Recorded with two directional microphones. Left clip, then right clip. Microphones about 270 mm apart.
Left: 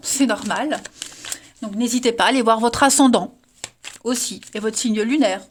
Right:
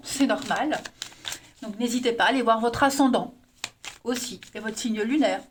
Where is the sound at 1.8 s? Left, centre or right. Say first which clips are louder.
Left 5 dB; left.